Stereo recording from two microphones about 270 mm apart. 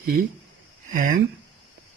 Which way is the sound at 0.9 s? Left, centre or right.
Right.